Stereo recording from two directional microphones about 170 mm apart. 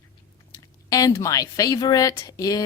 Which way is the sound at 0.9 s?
20° left (ahead or behind).